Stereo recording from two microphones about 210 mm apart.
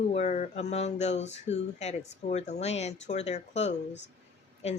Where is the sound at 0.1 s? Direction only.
35° left (ahead or behind).